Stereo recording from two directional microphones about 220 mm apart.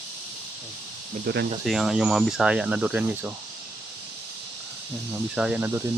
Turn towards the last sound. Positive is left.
turn(degrees=-5)  # may be behind; listen again after turning